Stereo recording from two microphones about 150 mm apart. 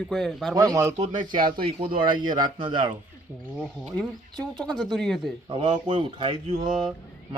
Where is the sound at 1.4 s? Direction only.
75° right (ahead or behind).